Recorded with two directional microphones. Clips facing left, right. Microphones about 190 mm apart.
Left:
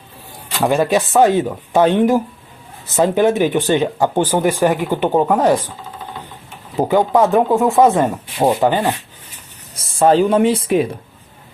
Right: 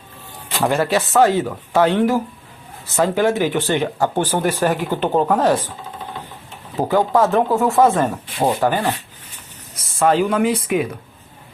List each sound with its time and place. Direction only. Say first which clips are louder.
0.6 s speech: left 3 dB; 15° left (ahead or behind)
6.7 s speech: left 2 dB; 15° left (ahead or behind)
9.7 s speech: left 4 dB; 30° left (ahead or behind)